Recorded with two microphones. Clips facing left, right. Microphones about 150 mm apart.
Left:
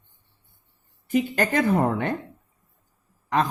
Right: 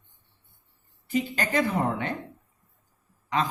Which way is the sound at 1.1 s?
50° left (ahead or behind).